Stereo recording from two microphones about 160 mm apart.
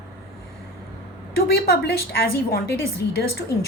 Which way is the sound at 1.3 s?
75° left (ahead or behind).